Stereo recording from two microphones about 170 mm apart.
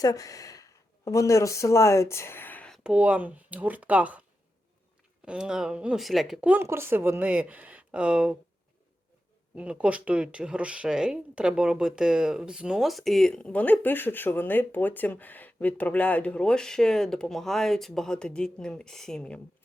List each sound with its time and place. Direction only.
0.0 s speech: 20° left (ahead or behind); by 4.2 s 10° right (ahead or behind)
5.2 s speech: 5° right (ahead or behind)
9.6 s speech: 5° right (ahead or behind)